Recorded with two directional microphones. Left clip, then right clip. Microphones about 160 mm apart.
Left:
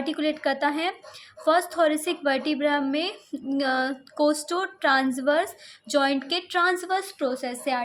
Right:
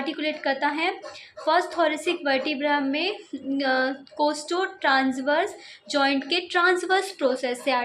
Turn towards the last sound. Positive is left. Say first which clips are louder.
# right 3 dB
turn(degrees=25)  # may be behind; listen again after turning